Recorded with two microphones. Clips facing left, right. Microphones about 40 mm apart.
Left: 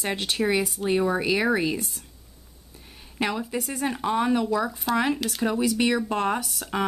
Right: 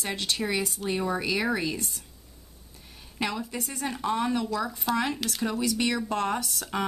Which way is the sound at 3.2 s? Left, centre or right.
Centre.